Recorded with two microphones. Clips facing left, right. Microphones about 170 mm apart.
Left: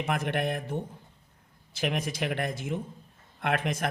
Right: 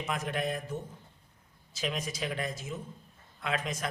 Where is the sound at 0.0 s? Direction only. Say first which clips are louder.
Left 4 dB; 60° left (ahead or behind).